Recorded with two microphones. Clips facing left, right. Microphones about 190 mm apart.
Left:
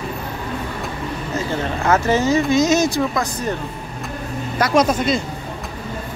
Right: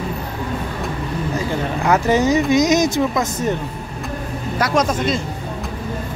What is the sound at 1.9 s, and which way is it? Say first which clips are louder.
Speech: right 1 dB; 15° right (ahead or behind).